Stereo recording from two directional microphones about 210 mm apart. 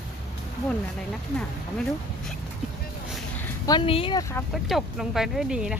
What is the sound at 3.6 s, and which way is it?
Speech, 25° left (ahead or behind).